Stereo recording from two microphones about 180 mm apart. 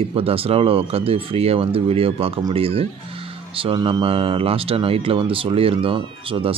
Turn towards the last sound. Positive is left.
turn(degrees=-30)  # may be behind; listen again after turning